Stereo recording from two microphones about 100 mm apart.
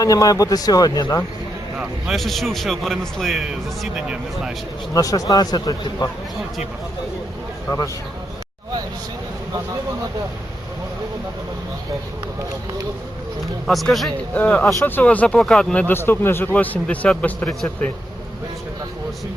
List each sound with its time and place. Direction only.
0.0 s a man's voice: 35° left (ahead or behind)
1.7 s a sound: 10° right (ahead or behind)
2.1 s a man's voice: centre (ahead or behind)
4.9 s a man's voice: 35° left (ahead or behind)
13.7 s a man's voice: centre (ahead or behind)
14.3 s a man's voice: 15° left (ahead or behind)
16.0 s a man's voice: 25° left (ahead or behind)